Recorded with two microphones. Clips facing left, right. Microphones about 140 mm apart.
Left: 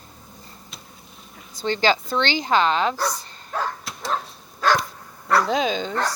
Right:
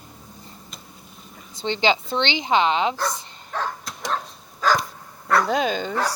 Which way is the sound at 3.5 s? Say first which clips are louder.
Left 1 dB; 5° left (ahead or behind).